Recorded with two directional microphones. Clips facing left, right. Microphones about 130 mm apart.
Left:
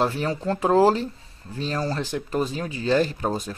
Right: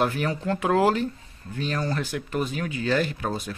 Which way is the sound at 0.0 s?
30° left (ahead or behind).